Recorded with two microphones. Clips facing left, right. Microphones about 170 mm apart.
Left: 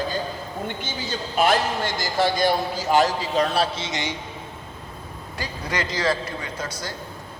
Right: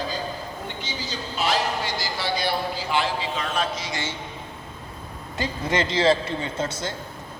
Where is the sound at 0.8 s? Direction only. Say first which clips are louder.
Left 3 dB; 50° left (ahead or behind); by 4.1 s 20° left (ahead or behind).